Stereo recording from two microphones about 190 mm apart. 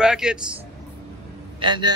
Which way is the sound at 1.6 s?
25° right (ahead or behind).